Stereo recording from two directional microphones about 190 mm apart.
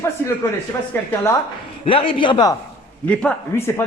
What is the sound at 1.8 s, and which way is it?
Speech, 30° left (ahead or behind).